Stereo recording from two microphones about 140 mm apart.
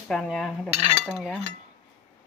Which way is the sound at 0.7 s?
45° right (ahead or behind).